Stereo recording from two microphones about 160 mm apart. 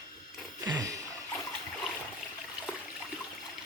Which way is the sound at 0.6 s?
25° right (ahead or behind).